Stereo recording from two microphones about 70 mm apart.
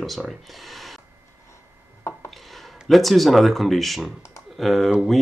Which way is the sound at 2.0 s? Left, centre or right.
Left.